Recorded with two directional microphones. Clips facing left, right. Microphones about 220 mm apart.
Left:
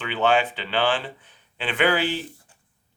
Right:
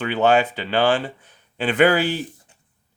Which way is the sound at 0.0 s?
45° right (ahead or behind).